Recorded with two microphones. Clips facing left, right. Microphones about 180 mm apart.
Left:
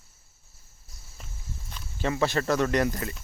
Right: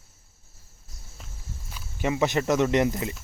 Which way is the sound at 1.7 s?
10° right (ahead or behind).